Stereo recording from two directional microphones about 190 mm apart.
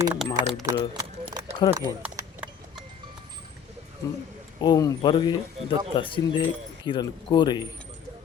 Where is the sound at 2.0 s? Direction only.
5° right (ahead or behind).